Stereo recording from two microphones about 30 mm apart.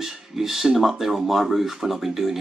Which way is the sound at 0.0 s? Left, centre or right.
Centre.